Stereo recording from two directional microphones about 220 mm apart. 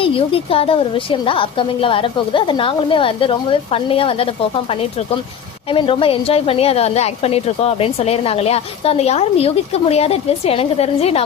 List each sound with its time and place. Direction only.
0.0 s a woman's voice: 25° left (ahead or behind)